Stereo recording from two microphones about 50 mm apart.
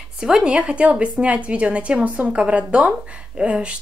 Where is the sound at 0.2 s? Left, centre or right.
Centre.